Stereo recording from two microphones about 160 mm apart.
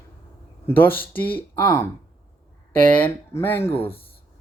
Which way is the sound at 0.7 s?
15° left (ahead or behind).